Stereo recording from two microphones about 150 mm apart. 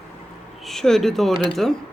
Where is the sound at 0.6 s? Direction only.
Centre (ahead or behind).